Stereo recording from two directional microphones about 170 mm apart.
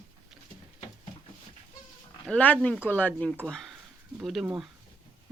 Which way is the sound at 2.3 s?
10° left (ahead or behind).